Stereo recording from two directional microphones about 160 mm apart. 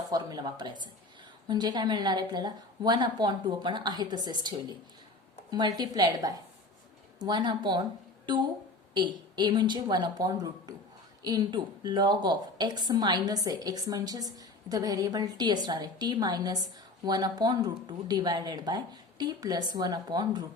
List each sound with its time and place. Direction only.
0.1 s a woman's voice: 25° right (ahead or behind)
9.0 s a woman's voice: 25° right (ahead or behind)